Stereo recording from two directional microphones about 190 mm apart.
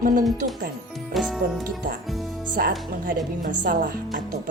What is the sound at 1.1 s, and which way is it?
Speech, centre (ahead or behind).